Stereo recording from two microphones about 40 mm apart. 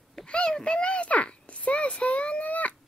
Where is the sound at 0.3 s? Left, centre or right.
Left.